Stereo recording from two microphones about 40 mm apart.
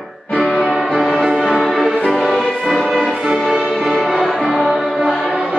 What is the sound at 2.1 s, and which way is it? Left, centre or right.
Music, centre.